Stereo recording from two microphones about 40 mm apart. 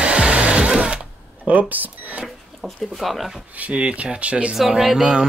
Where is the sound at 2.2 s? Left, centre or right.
Centre.